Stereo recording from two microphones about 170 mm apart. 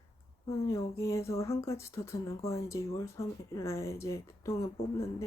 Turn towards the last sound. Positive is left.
turn(degrees=20)  # may be behind; listen again after turning